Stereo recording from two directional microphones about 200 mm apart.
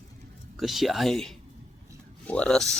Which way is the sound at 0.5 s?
Centre (ahead or behind).